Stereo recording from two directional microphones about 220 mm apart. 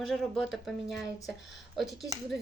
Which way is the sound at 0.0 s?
Centre (ahead or behind).